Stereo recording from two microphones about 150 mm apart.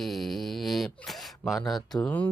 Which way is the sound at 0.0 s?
Centre (ahead or behind).